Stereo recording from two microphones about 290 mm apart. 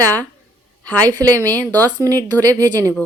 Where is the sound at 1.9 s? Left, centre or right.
Centre.